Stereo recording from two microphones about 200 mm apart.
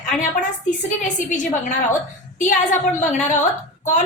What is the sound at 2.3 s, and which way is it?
A woman's voice, 40° left (ahead or behind).